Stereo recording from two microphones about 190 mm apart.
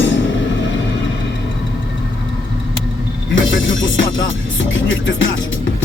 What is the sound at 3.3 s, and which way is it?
Music, 85° left.